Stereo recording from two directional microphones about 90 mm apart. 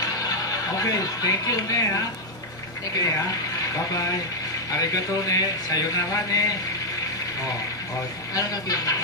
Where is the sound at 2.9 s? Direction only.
40° left (ahead or behind).